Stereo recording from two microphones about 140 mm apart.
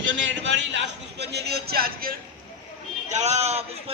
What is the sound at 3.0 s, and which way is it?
Speech, 55° right (ahead or behind).